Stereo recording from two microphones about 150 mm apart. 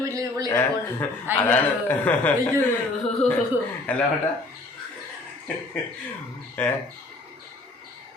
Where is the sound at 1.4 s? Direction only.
10° left (ahead or behind).